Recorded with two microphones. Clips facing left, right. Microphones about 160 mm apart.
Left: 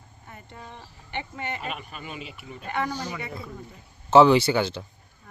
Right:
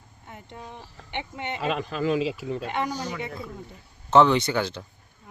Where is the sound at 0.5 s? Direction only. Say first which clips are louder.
Right 3 dB; 10° right (ahead or behind).